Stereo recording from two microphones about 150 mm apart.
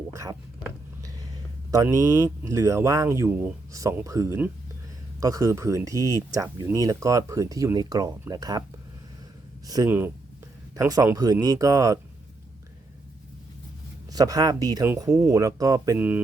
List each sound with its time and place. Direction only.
0.1 s whispering: 20° right (ahead or behind)
1.7 s speech: 20° right (ahead or behind)
9.6 s speech: 25° right (ahead or behind)
14.1 s speech: 25° right (ahead or behind)
16.0 s mantra: 10° right (ahead or behind)